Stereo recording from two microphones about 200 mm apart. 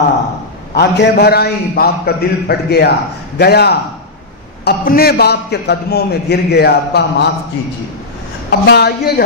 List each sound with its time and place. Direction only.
0.7 s a man's voice: 55° left (ahead or behind)
8.5 s a man's voice: 55° left (ahead or behind)